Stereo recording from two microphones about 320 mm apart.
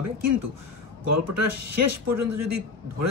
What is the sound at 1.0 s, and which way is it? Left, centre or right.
Speech, right.